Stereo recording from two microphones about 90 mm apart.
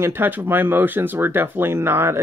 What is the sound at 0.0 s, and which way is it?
Speech, 25° right (ahead or behind).